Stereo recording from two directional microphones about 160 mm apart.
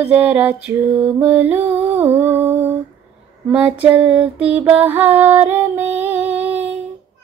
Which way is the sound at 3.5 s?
10° right (ahead or behind).